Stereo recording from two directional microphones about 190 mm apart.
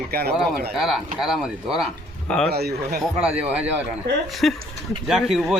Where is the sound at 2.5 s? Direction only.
55° right (ahead or behind).